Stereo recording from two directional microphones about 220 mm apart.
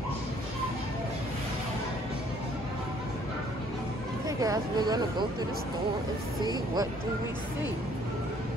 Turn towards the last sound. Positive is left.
turn(degrees=-20)  # may be behind; listen again after turning